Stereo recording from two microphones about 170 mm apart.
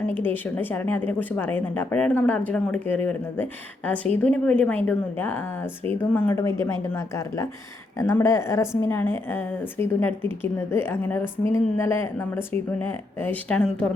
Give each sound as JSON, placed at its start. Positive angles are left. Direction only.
{"t": 0.5, "sound": "speech", "side_deg": 10}